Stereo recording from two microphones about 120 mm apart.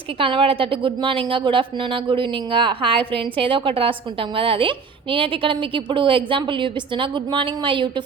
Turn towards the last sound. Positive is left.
turn(degrees=-40)  # may be behind; listen again after turning